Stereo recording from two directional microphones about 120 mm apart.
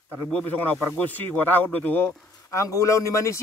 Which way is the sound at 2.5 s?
25° left (ahead or behind).